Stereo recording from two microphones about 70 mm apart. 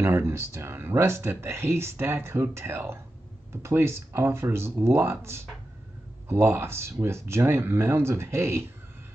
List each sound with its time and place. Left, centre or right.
0.0 s speech: right